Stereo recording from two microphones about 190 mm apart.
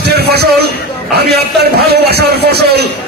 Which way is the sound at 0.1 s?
55° right (ahead or behind).